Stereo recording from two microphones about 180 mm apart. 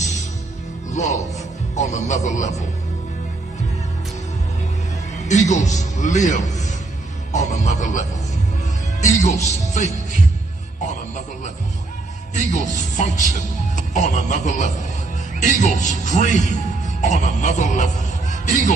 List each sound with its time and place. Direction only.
0.9 s music: 40° left (ahead or behind)
1.7 s a man's voice: 40° left (ahead or behind)
5.3 s a man's voice: 40° left (ahead or behind)
12.3 s a man's voice: 45° left (ahead or behind)